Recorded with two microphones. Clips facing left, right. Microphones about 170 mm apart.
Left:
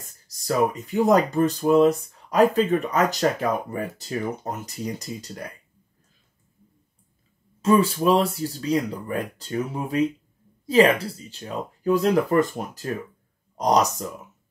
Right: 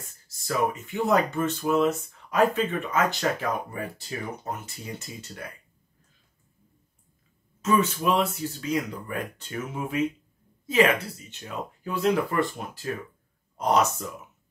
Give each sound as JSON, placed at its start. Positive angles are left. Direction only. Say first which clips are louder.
{"t": 0.0, "sound": "speech", "louder": "left 1 dB", "side_deg": 40}
{"t": 7.6, "sound": "speech", "louder": "left 5 dB", "side_deg": 35}